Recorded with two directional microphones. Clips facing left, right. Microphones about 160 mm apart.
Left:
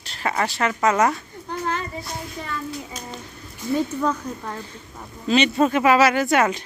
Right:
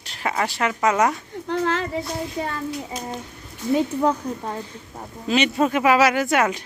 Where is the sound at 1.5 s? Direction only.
90° right.